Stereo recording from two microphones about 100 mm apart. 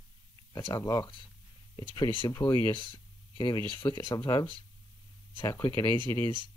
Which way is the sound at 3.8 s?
50° left (ahead or behind).